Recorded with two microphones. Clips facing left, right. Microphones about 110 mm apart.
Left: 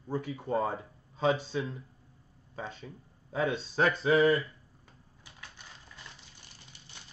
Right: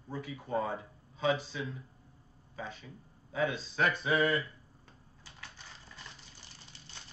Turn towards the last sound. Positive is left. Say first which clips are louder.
# even
turn(degrees=10)  # may be behind; listen again after turning